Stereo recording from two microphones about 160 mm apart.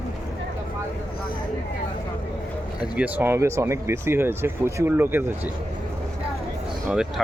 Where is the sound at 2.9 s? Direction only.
10° right (ahead or behind).